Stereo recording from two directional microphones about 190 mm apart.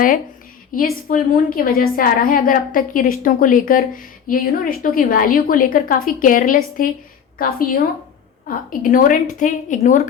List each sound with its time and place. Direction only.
0.7 s a woman's voice: 45° left (ahead or behind)